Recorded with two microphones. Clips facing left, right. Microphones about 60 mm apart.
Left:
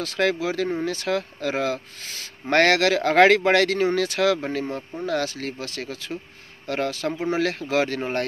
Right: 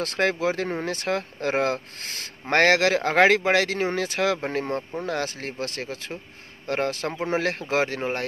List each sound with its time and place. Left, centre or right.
0.2 s speech: right
2.4 s speech: right